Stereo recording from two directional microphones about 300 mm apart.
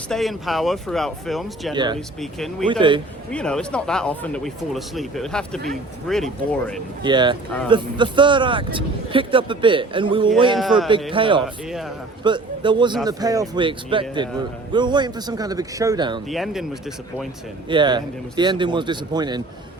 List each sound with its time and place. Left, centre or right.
0.1 s speech: centre
1.7 s speech: centre
2.2 s speech: centre
7.0 s speech: centre
10.5 s speech: centre
11.1 s speech: centre
11.4 s speech: centre
12.2 s a man's voice: centre
16.3 s speech: centre
17.7 s speech: centre